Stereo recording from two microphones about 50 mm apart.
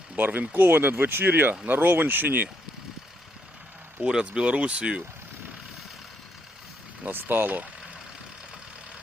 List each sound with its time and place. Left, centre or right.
0.2 s speech: right
4.0 s speech: centre
7.1 s speech: right